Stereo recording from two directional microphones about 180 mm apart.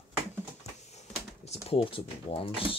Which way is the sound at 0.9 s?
35° left (ahead or behind).